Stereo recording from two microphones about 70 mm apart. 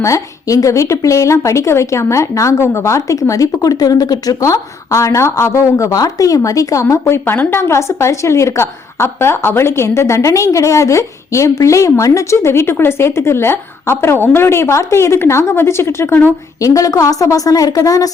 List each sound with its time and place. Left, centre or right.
0.0 s a woman's voice: left
7.1 s a woman's voice: left
16.6 s a woman's voice: left